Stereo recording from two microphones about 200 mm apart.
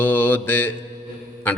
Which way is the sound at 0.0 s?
10° left (ahead or behind).